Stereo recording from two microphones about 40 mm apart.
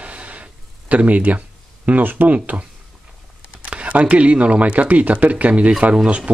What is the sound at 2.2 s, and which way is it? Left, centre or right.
Speech, right.